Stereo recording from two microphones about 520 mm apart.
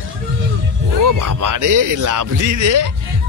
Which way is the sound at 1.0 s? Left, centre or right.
Right.